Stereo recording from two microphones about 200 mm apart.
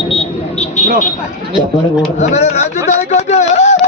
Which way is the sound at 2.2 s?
35° left (ahead or behind).